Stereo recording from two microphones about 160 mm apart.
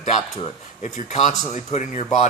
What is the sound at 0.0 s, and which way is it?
Speech, 45° left (ahead or behind).